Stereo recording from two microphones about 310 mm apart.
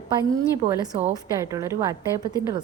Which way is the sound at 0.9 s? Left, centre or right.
Right.